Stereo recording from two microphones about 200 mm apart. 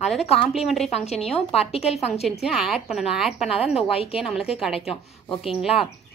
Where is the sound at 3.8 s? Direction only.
30° left (ahead or behind).